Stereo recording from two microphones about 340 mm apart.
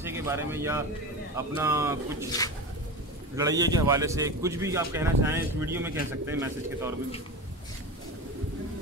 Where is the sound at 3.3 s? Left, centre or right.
Centre.